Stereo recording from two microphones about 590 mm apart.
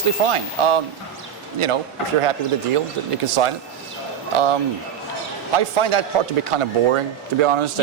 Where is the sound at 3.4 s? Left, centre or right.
Right.